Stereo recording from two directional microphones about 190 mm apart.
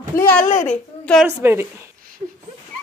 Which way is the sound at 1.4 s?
10° right (ahead or behind).